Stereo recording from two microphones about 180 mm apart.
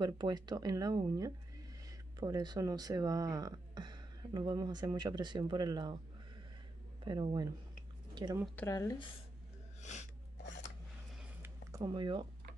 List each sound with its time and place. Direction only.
0.0 s speech: 25° right (ahead or behind)
7.1 s speech: 25° right (ahead or behind)
8.1 s a sound: 25° right (ahead or behind)
8.5 s speech: 15° left (ahead or behind)
9.8 s snort: 40° left (ahead or behind)
11.4 s a sound: 20° right (ahead or behind)